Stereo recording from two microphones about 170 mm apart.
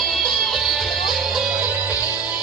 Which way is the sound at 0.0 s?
Centre (ahead or behind).